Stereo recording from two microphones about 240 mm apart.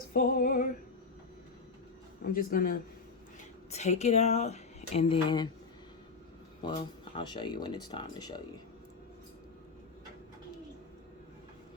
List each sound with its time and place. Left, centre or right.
0.1 s female singing: left
2.2 s female singing: left
3.7 s speech: left
6.6 s speech: centre